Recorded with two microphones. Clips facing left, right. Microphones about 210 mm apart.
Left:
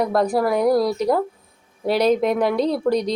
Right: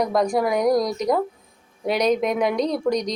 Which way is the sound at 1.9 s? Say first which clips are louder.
Left 3 dB; 30° left (ahead or behind).